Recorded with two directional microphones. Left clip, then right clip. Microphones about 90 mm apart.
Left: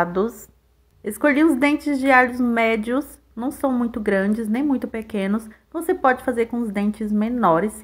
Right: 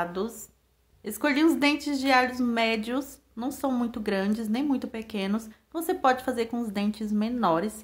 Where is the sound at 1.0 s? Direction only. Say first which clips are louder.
Left 6 dB; 20° left (ahead or behind).